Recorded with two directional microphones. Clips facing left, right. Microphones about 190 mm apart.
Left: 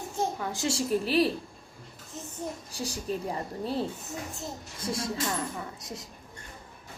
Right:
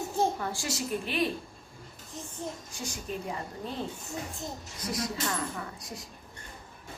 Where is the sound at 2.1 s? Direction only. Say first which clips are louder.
Left 1 dB; 5° left (ahead or behind).